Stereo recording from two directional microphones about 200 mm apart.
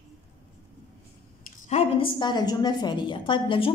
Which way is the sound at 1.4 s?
35° left (ahead or behind).